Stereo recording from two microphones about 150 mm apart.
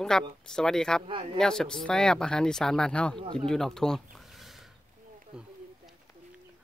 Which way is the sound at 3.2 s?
35° right (ahead or behind).